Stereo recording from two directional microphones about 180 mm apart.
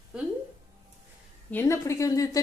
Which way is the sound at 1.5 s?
15° left (ahead or behind).